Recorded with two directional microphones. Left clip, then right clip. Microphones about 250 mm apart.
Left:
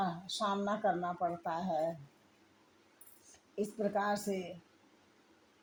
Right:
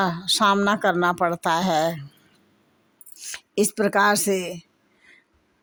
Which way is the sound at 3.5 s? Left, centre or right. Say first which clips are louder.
Right 14 dB; right.